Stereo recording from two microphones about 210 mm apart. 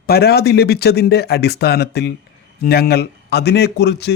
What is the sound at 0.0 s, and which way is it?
Speech, 50° left (ahead or behind).